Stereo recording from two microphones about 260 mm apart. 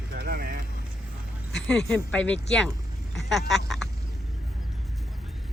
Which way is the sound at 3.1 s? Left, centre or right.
Centre.